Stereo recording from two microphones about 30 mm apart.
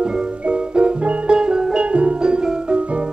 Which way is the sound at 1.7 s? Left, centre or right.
Right.